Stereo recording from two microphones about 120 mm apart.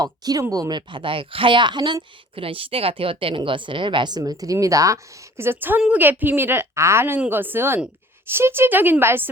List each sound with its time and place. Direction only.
0.0 s speech: 30° right (ahead or behind)
5.4 s speech: 20° right (ahead or behind)